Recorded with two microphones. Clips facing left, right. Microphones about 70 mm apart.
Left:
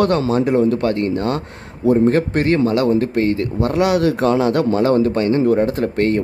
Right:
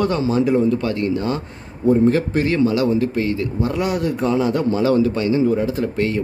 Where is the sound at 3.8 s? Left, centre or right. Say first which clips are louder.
Left 7 dB; left.